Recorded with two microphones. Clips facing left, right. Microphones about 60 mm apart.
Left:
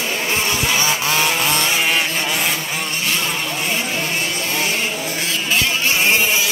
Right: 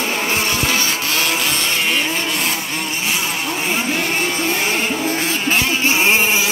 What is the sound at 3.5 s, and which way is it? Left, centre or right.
Vehicle, right.